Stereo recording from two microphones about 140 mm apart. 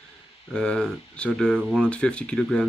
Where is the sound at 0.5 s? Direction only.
5° left (ahead or behind).